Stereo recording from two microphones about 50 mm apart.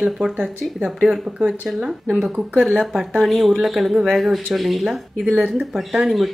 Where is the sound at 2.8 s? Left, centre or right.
Centre.